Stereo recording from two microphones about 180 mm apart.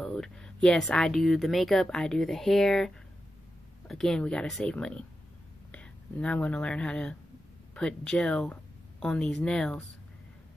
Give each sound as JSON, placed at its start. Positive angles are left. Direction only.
{"t": 0.0, "sound": "speech", "side_deg": 5}